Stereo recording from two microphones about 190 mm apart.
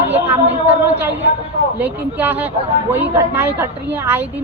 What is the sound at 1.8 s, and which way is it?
Speech, 10° right (ahead or behind).